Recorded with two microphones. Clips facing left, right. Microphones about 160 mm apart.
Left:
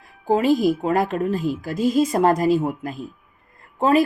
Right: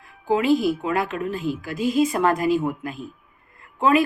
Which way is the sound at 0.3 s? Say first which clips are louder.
Left 2 dB; 40° left (ahead or behind).